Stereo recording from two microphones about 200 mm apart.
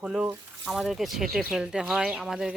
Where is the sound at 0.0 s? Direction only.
5° right (ahead or behind).